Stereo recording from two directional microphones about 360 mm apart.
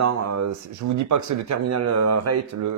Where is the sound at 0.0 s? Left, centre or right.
Right.